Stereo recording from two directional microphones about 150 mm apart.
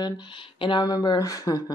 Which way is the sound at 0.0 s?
30° left (ahead or behind).